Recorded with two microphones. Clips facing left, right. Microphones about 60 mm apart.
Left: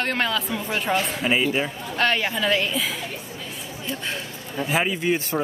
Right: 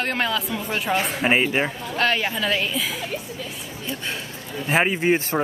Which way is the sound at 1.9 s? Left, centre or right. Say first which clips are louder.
Even; centre.